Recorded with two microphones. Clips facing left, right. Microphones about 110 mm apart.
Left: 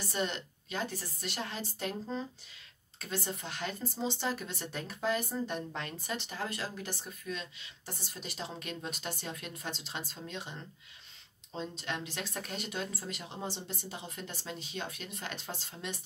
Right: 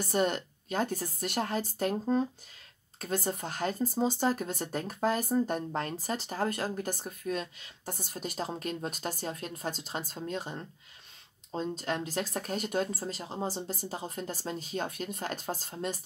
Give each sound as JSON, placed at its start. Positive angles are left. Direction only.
{"t": 0.0, "sound": "speech", "side_deg": -50}